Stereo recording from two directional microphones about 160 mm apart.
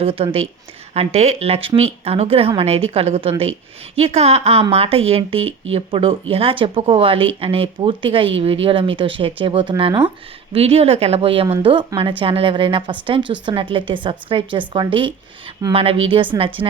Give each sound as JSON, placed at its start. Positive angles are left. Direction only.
{"t": 0.0, "sound": "speech", "side_deg": -35}